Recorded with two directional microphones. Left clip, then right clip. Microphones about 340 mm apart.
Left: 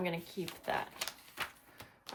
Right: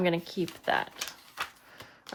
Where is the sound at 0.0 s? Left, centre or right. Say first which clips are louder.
Right 9 dB; right.